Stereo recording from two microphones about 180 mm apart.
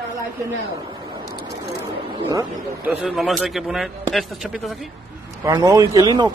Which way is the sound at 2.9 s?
5° right (ahead or behind).